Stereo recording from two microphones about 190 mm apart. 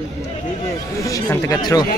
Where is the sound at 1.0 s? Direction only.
15° left (ahead or behind).